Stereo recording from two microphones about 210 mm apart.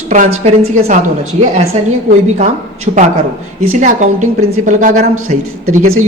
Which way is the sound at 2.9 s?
40° right (ahead or behind).